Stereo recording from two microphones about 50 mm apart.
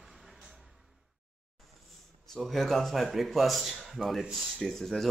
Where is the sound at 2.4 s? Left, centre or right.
Centre.